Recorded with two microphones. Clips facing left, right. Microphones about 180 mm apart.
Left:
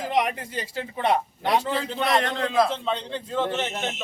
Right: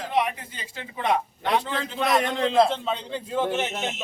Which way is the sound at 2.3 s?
25° right (ahead or behind).